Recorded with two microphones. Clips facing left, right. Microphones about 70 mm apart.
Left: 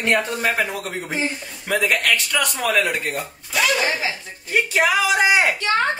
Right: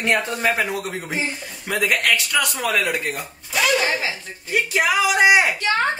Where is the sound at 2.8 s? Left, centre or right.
Left.